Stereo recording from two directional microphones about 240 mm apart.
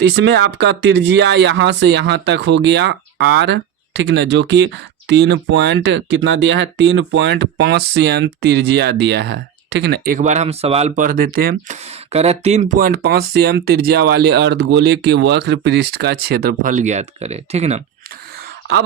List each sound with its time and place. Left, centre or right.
0.0 s speech: right
12.1 s speech: right
12.7 s speech: right